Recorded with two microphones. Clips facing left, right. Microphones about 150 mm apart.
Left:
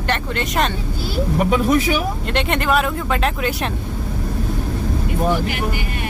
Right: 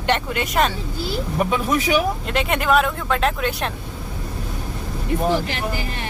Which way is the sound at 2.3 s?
5° right (ahead or behind).